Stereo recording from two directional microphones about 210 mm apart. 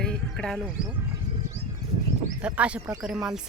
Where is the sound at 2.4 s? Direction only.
5° right (ahead or behind).